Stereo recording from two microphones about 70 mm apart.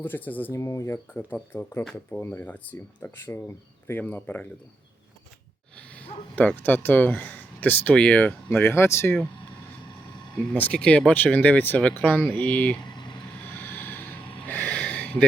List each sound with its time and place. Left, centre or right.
0.0 s speech: left
0.5 s speech: left
1.1 s speech: left
3.2 s speech: left
4.0 s speech: left
6.0 s speech: left
8.3 s speech: left
10.5 s speech: left
12.8 s vehicle: left
13.3 s a sound: left